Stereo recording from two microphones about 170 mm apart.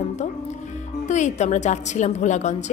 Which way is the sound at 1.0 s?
45° left (ahead or behind).